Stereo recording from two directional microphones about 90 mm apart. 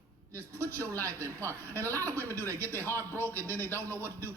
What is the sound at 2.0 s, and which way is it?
A man's voice, 25° left (ahead or behind).